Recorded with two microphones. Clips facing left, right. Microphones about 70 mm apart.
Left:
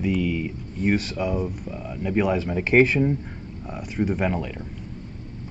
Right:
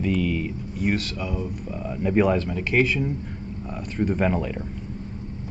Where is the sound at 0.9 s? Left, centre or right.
Left.